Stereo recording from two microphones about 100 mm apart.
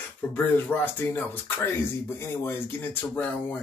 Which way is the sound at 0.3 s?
20° left (ahead or behind).